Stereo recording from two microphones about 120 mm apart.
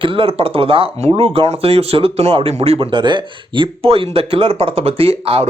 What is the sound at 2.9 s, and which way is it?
A man's voice, 40° right (ahead or behind).